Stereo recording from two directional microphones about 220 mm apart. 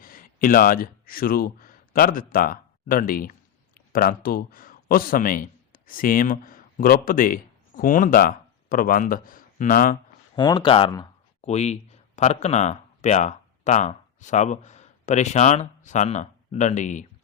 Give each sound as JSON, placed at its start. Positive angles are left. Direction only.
{"t": 0.0, "sound": "speech", "side_deg": 40}
{"t": 10.3, "sound": "speech", "side_deg": 20}
{"t": 11.4, "sound": "speech", "side_deg": 30}